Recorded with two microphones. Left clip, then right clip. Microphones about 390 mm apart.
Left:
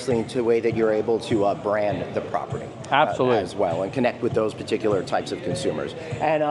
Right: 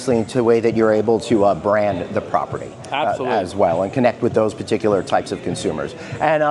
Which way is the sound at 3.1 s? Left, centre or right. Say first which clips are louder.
Right 1 dB; left.